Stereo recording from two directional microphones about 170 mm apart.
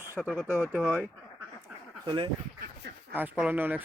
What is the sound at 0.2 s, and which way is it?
Speech, 5° left (ahead or behind).